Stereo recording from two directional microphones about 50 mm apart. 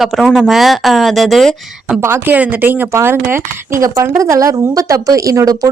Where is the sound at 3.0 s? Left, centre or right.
Right.